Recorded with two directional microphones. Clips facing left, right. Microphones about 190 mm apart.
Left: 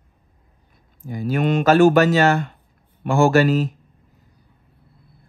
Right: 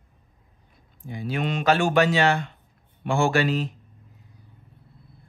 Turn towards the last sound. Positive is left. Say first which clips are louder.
# left 7 dB
turn(degrees=45)  # may be behind; listen again after turning